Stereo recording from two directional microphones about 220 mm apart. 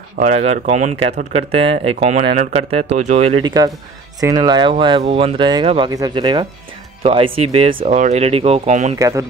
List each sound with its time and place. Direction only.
0.2 s speech: 30° right (ahead or behind)
8.9 s speech: 15° right (ahead or behind)